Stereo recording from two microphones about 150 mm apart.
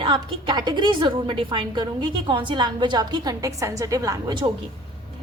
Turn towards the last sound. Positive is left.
turn(degrees=-25)  # may be behind; listen again after turning